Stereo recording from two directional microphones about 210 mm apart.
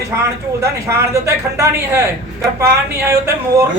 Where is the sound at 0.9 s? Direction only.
15° right (ahead or behind).